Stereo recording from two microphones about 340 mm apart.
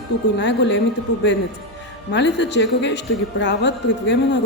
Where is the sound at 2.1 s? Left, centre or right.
Left.